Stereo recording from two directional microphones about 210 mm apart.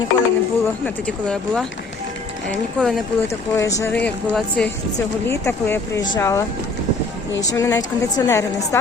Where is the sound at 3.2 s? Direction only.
15° left (ahead or behind).